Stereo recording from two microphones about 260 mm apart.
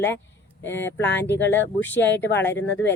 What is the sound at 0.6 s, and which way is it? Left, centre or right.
Speech, centre.